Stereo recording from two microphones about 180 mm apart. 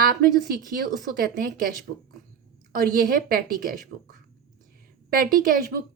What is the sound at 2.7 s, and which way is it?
A woman's voice, 55° right (ahead or behind).